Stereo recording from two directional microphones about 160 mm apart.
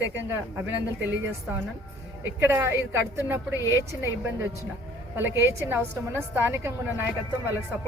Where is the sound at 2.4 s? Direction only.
15° right (ahead or behind).